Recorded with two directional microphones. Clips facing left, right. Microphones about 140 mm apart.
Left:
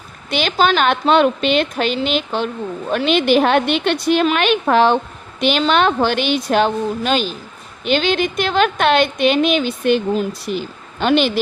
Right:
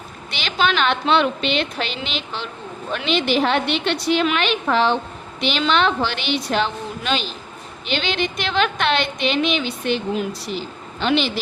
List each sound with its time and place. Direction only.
0.3 s a woman's voice: 50° left (ahead or behind)